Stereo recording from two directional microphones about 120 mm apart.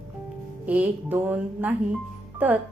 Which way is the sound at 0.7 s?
15° right (ahead or behind).